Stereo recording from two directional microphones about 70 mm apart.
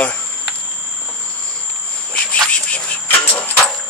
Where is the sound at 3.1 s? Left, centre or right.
Left.